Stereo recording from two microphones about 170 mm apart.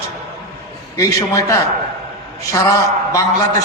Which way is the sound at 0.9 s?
20° left (ahead or behind).